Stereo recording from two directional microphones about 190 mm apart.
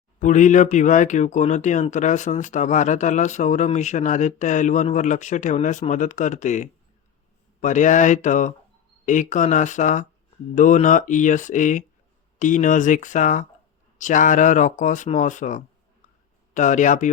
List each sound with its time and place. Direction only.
0.2 s speech: 40° left (ahead or behind)